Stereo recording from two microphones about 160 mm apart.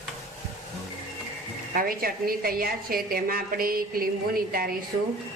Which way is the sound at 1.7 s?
65° right (ahead or behind).